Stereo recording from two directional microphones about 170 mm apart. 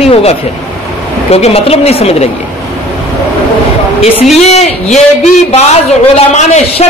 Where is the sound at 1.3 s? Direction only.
35° left (ahead or behind).